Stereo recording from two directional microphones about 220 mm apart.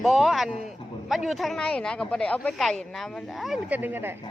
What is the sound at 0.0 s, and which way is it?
Speech, centre (ahead or behind).